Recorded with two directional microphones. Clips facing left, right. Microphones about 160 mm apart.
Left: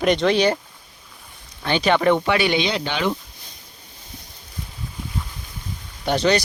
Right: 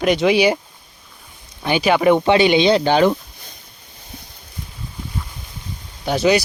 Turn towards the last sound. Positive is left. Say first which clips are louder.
# right 3 dB
turn(degrees=-5)  # may be behind; listen again after turning